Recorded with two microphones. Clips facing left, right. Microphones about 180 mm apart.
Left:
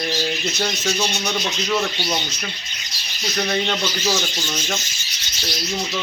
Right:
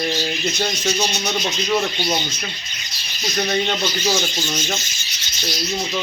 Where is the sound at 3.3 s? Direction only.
10° right (ahead or behind).